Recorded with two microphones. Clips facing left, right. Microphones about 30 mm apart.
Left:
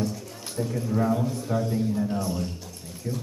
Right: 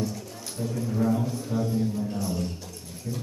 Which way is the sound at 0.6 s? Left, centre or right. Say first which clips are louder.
Left 2 dB; centre.